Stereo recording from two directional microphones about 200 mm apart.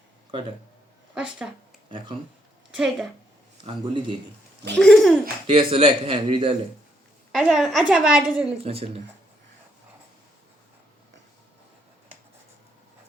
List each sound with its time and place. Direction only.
1.1 s a woman's voice: 5° right (ahead or behind)
2.7 s a woman's voice: 5° right (ahead or behind)
3.6 s a man's voice: 25° right (ahead or behind)
4.7 s a woman's voice: 5° left (ahead or behind)
5.5 s a man's voice: 25° right (ahead or behind)
7.3 s a woman's voice: centre (ahead or behind)
8.6 s speech: 30° right (ahead or behind)